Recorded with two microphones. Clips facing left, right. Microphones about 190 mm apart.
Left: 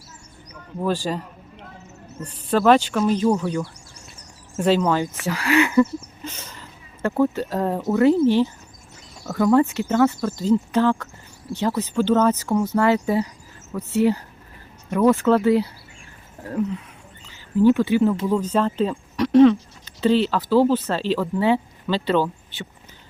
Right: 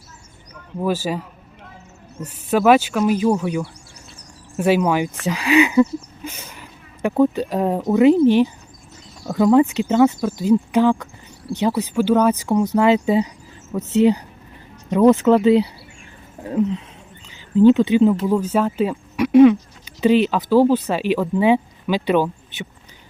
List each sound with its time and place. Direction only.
0.8 s speech: 5° right (ahead or behind)
18.3 s speech: 10° right (ahead or behind)